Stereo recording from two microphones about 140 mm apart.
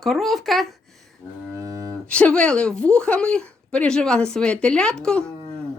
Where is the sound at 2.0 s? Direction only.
10° left (ahead or behind).